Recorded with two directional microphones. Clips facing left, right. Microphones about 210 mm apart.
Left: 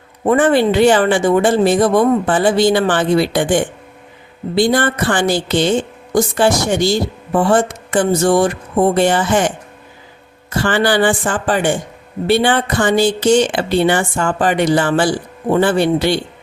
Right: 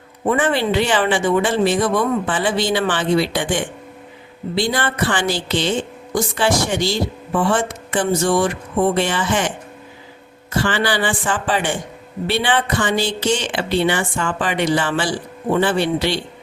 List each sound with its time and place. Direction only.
0.3 s speech: 45° left (ahead or behind)
10.6 s speech: 45° left (ahead or behind)